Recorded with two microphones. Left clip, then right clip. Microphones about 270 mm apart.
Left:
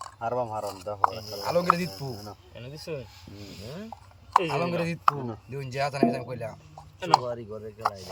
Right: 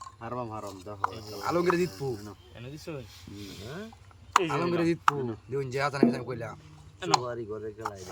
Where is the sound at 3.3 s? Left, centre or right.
Centre.